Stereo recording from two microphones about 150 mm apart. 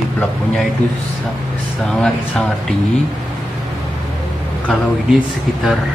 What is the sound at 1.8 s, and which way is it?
Speech, 5° left (ahead or behind).